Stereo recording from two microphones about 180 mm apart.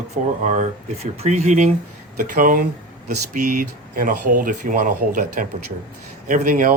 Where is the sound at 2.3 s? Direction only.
55° right (ahead or behind).